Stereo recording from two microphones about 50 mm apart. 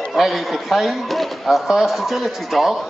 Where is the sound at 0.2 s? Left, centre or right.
Centre.